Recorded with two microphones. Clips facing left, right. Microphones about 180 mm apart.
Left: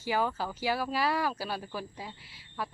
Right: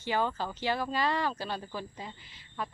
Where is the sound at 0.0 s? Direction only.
5° left (ahead or behind).